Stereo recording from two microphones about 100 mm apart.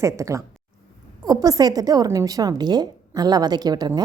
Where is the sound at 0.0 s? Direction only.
30° right (ahead or behind).